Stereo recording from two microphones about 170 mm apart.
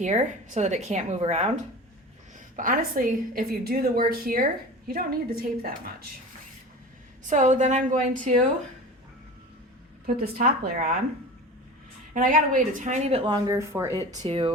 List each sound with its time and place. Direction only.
0.0 s a woman's voice: 45° right (ahead or behind)
2.6 s a woman's voice: 55° right (ahead or behind)
7.3 s a woman's voice: 45° right (ahead or behind)
10.2 s a woman's voice: 55° right (ahead or behind)
12.1 s a woman's voice: 50° right (ahead or behind); by 14.5 s 30° right (ahead or behind)